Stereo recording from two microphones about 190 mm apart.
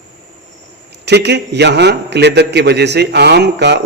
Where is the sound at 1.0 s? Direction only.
65° right (ahead or behind).